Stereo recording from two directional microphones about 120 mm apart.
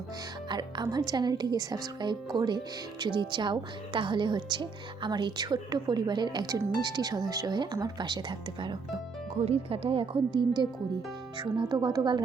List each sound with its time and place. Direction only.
0.4 s a woman's voice: 40° right (ahead or behind)
9.4 s a woman's voice: 55° right (ahead or behind); by 12.2 s 35° right (ahead or behind)